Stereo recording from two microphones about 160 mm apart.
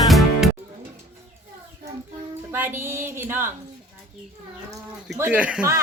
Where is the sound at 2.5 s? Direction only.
15° right (ahead or behind).